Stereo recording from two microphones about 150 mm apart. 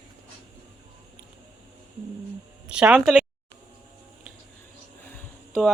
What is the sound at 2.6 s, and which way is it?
Speech, 10° right (ahead or behind).